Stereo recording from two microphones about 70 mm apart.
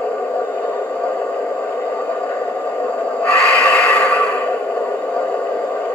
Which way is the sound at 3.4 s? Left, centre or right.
Centre.